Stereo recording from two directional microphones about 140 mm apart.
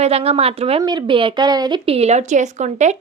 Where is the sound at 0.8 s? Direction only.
35° right (ahead or behind).